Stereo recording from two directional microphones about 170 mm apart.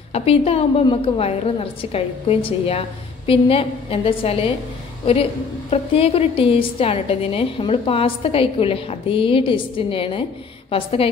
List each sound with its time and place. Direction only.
0.1 s a woman's voice: 35° left (ahead or behind)